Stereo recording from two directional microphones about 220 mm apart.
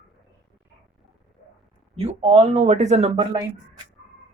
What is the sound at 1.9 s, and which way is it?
Speech, 25° right (ahead or behind).